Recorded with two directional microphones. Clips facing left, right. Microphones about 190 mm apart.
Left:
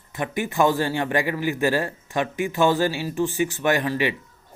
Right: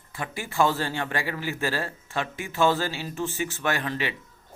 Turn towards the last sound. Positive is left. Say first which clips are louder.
# left 6 dB
turn(degrees=15)  # may be behind; listen again after turning